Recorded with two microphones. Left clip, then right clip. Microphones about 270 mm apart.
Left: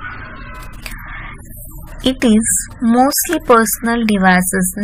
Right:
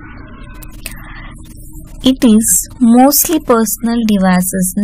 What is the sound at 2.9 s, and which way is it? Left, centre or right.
Speech, right.